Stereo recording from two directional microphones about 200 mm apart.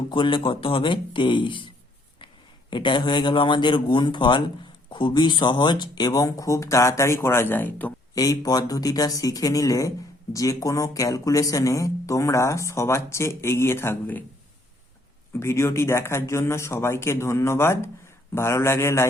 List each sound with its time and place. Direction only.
0.1 s a man's voice: 25° left (ahead or behind); by 14.3 s 10° left (ahead or behind)
15.3 s speech: 15° left (ahead or behind)